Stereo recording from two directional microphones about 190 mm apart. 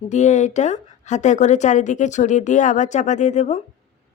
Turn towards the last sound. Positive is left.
turn(degrees=40)  # may be behind; listen again after turning